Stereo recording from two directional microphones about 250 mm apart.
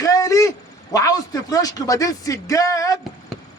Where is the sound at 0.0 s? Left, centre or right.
Centre.